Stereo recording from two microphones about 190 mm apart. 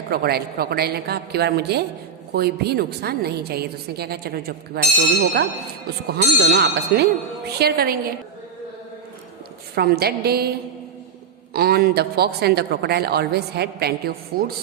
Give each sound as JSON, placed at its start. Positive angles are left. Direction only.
{"t": 0.1, "sound": "a woman's voice", "side_deg": -55}
{"t": 9.7, "sound": "a woman's voice", "side_deg": -55}
{"t": 11.5, "sound": "a woman's voice", "side_deg": -55}